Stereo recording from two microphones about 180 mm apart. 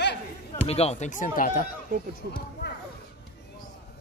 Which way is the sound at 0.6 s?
35° left (ahead or behind).